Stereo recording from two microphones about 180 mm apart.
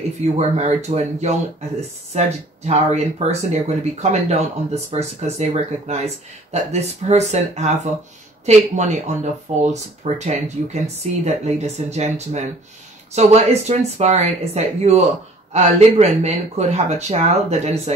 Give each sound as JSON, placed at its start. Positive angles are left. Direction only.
{"t": 0.2, "sound": "speech", "side_deg": -40}